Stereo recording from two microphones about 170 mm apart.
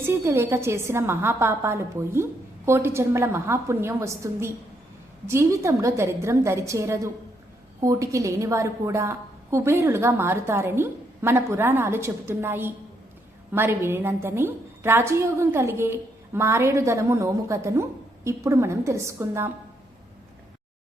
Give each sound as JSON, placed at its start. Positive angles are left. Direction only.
{"t": 0.0, "sound": "a woman's voice", "side_deg": -15}